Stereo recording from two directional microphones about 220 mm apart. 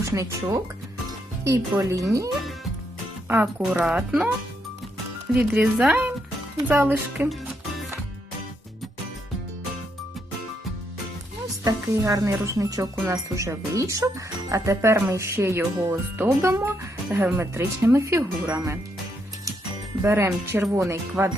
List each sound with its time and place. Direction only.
0.0 s speech: 15° right (ahead or behind)
3.2 s speech: 10° right (ahead or behind)
5.3 s speech: 5° right (ahead or behind)
11.6 s speech: 15° right (ahead or behind)
20.0 s speech: 10° right (ahead or behind)